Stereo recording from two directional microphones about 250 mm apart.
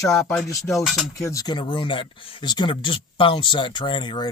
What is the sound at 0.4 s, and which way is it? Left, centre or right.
Cutlery, centre.